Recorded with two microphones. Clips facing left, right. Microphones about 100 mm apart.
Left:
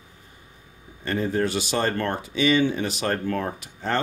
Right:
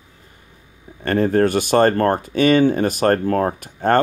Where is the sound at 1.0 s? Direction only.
60° right (ahead or behind).